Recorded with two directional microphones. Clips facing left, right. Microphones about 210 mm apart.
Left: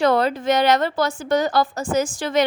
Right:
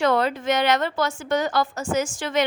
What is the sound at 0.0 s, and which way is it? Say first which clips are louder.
A woman's voice: left 3 dB; 35° left (ahead or behind).